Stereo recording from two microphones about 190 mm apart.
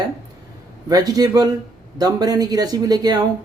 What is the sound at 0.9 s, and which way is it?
Speech, 20° right (ahead or behind).